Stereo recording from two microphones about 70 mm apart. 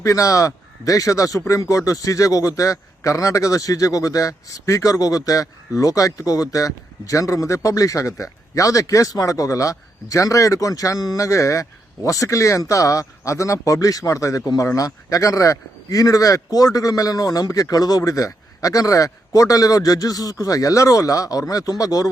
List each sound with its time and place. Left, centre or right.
0.0 s a man's voice: left